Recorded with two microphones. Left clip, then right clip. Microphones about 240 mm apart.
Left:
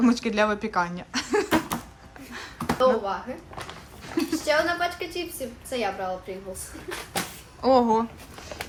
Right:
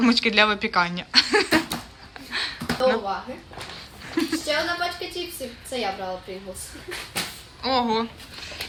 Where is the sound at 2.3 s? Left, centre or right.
Centre.